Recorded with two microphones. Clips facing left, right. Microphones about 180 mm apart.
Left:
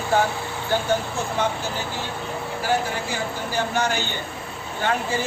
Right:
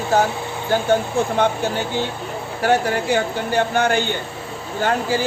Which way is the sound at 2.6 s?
70° right (ahead or behind).